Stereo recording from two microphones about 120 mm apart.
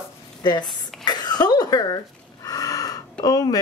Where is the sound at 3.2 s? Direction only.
30° left (ahead or behind).